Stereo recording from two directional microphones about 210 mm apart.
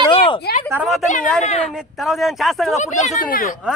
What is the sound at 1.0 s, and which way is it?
Speech, 35° left (ahead or behind).